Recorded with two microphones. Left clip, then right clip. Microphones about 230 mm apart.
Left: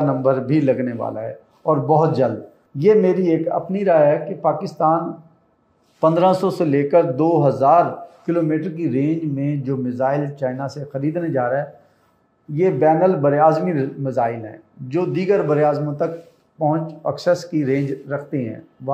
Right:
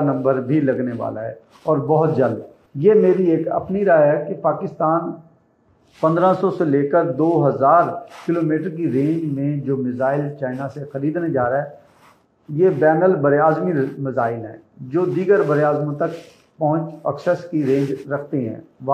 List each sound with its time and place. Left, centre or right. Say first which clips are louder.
0.0 s a man's voice: left 1 dB; left